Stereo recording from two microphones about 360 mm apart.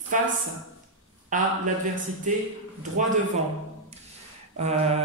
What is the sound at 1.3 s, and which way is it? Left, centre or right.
Speech, right.